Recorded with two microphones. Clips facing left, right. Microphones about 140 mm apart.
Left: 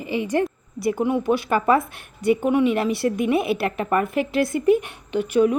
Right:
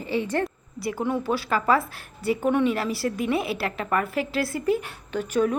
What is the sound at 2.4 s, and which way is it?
Speech, 10° left (ahead or behind).